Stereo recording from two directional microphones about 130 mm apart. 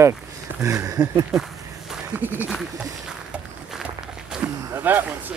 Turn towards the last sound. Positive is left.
turn(degrees=-15)  # may be behind; listen again after turning